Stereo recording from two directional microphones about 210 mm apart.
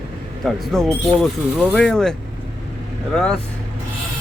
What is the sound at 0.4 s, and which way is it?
Speech, centre (ahead or behind).